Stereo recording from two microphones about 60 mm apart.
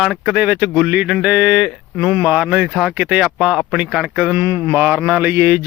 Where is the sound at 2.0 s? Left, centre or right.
Right.